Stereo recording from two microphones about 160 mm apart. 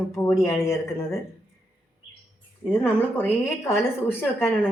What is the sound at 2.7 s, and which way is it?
A woman's voice, 10° left (ahead or behind).